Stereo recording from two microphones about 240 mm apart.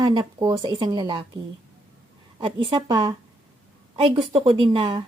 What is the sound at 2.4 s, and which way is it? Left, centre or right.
A woman's voice, right.